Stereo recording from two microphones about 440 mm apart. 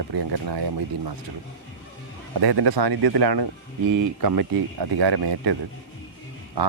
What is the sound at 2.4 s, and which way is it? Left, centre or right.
Speech, right.